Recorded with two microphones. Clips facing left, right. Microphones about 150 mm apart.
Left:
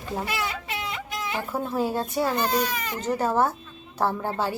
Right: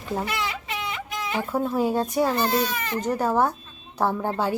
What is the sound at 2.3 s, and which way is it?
Speech, 10° left (ahead or behind).